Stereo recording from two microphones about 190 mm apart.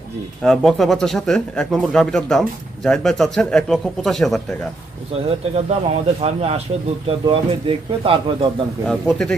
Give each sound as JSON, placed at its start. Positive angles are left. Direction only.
{"t": 0.4, "sound": "speech", "side_deg": 0}
{"t": 5.3, "sound": "speech", "side_deg": -35}
{"t": 8.8, "sound": "speech", "side_deg": 0}